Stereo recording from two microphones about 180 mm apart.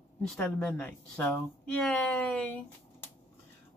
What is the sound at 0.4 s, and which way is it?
Speech, 10° left (ahead or behind).